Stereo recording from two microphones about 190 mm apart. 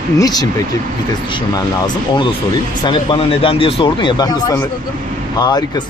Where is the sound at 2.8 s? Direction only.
25° left (ahead or behind).